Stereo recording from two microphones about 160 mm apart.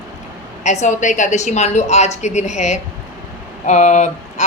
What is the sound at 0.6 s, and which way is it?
A woman's voice, 50° left (ahead or behind).